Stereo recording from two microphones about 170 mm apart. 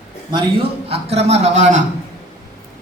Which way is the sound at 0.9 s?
40° right (ahead or behind).